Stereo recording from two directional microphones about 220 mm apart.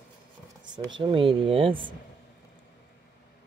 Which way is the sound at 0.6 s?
20° right (ahead or behind).